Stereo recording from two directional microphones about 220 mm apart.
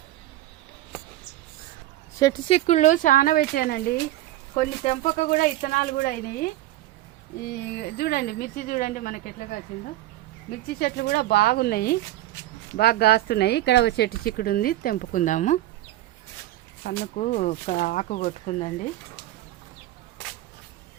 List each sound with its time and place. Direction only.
2.1 s speech: 15° left (ahead or behind)
2.6 s speech: 30° left (ahead or behind)
7.4 s speech: 45° left (ahead or behind)
10.7 s speech: 45° left (ahead or behind)
17.0 s speech: 35° left (ahead or behind)